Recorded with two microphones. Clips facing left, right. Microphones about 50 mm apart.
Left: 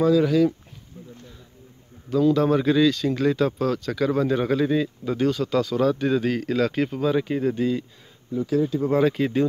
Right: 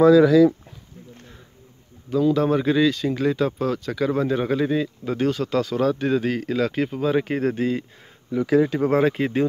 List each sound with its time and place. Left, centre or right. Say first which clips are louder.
2.0 s speech: even; centre
5.0 s speech: even; right; by 7.0 s centre
7.0 s speech: right 1 dB; right
7.2 s speech: right 1 dB; right
8.3 s speech: right 4 dB; right
8.9 s speech: left 1 dB; right